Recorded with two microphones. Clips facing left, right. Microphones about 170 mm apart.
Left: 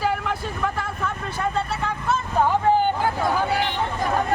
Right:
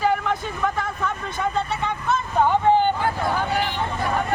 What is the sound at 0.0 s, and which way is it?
Vehicle, 5° left (ahead or behind).